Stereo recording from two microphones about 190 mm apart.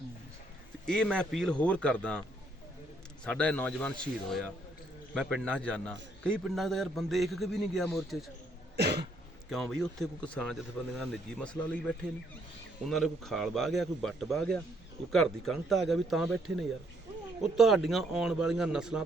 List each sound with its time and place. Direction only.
0.9 s a man's voice: 5° left (ahead or behind)
3.2 s a man's voice: 5° left (ahead or behind)
8.7 s cough: 60° right (ahead or behind)
9.5 s a man's voice: centre (ahead or behind)